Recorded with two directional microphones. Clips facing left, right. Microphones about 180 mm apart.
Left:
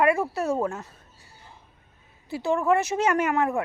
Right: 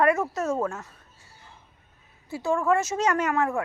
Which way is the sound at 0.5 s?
15° left (ahead or behind).